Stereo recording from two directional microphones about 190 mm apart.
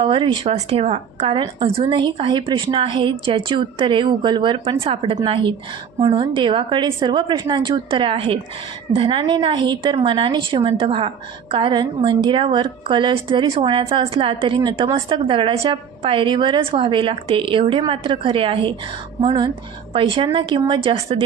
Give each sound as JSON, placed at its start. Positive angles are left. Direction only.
{"t": 0.0, "sound": "a woman's voice", "side_deg": -25}